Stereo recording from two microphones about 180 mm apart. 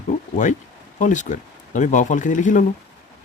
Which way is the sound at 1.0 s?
45° left (ahead or behind).